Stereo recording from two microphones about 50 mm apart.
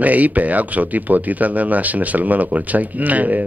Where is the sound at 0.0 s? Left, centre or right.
Right.